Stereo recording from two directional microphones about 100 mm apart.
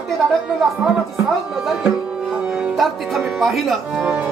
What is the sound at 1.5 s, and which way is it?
Music, 5° right (ahead or behind).